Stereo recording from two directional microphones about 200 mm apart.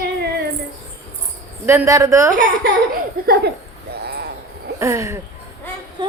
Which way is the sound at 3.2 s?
45° right (ahead or behind).